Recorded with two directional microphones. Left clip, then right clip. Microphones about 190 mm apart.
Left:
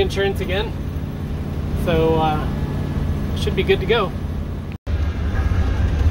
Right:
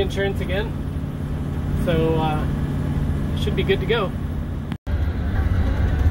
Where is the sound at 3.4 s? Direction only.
10° left (ahead or behind).